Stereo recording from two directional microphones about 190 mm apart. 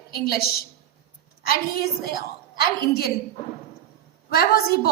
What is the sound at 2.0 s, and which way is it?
Speech, 55° left (ahead or behind).